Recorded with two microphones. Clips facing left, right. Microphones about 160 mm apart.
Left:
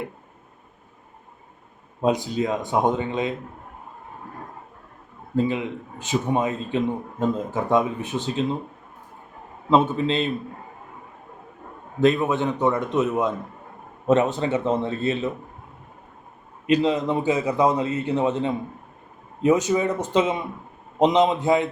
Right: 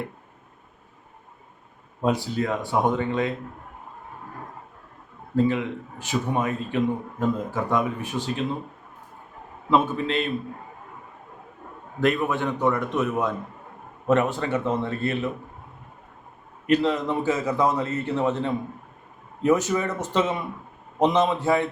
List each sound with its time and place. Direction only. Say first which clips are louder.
2.0 s a man's voice: left 2 dB; 20° left (ahead or behind)
5.4 s a man's voice: right 1 dB; 20° left (ahead or behind)
9.6 s a man's voice: left 3 dB; 25° left (ahead or behind)
11.9 s a man's voice: left 3 dB; 20° left (ahead or behind)
16.6 s a man's voice: left 1 dB; 15° left (ahead or behind)